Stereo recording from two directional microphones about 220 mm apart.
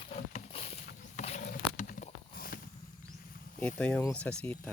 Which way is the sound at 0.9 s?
35° left (ahead or behind).